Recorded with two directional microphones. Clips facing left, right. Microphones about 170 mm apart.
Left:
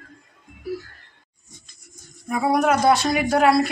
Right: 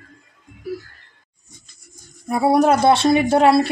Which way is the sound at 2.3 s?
30° right (ahead or behind).